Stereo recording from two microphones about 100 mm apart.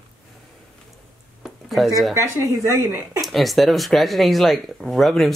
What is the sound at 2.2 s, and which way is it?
Speech, 30° right (ahead or behind).